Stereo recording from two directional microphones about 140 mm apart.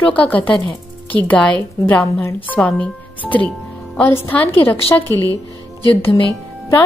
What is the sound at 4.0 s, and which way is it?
Speech, 15° left (ahead or behind).